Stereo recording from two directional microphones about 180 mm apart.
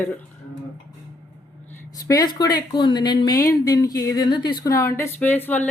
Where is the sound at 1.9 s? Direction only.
20° left (ahead or behind).